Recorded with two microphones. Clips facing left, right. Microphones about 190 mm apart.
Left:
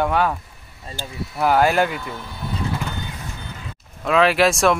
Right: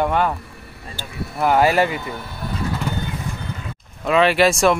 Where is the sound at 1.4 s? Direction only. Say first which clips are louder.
Right 1 dB; centre (ahead or behind).